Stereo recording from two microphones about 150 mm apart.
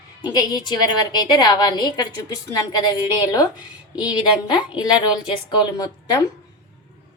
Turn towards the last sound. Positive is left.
turn(degrees=25)  # may be behind; listen again after turning